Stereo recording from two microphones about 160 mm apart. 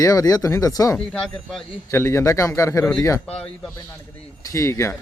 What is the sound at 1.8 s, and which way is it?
Speech, 15° left (ahead or behind).